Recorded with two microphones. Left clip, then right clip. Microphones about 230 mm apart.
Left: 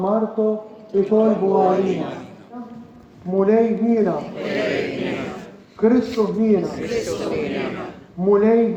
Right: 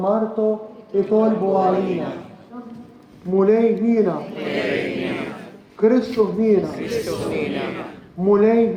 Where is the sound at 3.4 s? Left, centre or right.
Right.